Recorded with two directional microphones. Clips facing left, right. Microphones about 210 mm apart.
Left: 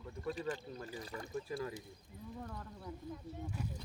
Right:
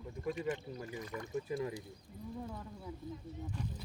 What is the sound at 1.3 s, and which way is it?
Speech, 20° right (ahead or behind).